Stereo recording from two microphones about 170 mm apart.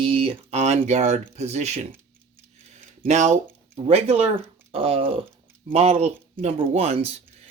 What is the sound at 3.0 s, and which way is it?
Speech, 45° right (ahead or behind).